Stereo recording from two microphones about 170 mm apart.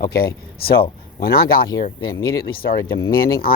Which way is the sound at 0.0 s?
65° left (ahead or behind).